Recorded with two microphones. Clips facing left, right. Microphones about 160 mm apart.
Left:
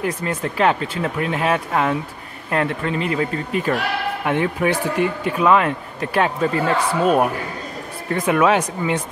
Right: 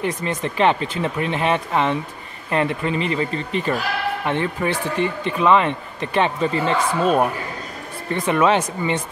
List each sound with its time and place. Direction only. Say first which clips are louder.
0.0 s speech: even; 5° left (ahead or behind)